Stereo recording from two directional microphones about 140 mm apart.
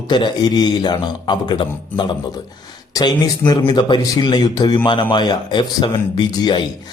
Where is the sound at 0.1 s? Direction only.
30° left (ahead or behind).